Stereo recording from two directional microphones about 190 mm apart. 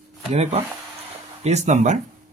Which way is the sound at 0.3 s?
35° right (ahead or behind).